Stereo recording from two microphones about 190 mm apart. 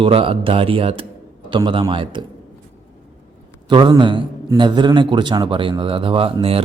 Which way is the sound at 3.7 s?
25° right (ahead or behind).